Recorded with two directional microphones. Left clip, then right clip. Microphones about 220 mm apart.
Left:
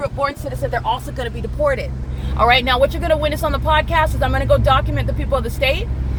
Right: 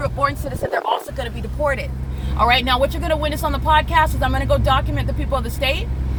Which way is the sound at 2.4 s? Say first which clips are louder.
Left 2 dB; 5° right (ahead or behind).